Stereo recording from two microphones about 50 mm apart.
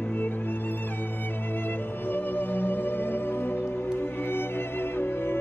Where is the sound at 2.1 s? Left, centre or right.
Left.